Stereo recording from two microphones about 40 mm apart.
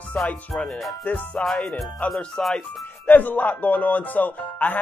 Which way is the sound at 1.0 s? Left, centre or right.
Left.